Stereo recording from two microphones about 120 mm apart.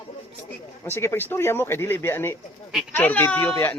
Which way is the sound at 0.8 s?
20° left (ahead or behind).